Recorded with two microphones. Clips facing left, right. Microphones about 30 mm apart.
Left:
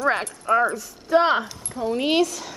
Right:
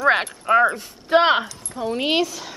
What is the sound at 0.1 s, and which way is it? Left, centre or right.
Speech, right.